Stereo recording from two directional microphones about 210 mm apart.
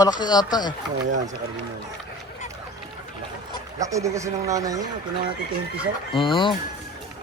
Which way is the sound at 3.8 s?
15° right (ahead or behind).